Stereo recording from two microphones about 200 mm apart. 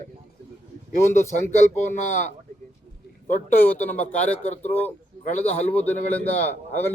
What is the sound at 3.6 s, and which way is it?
A man's voice, 10° left (ahead or behind).